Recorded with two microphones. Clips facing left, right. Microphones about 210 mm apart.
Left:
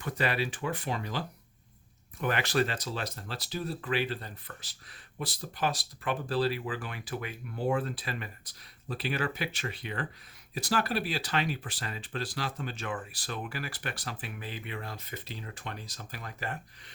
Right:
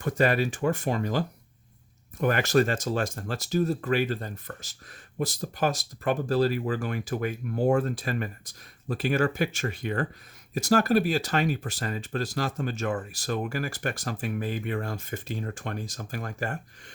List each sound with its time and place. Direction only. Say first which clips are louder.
0.0 s speech: right 7 dB; 45° right (ahead or behind)